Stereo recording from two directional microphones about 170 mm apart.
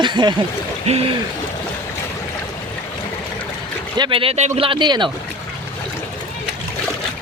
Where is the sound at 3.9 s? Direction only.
30° right (ahead or behind).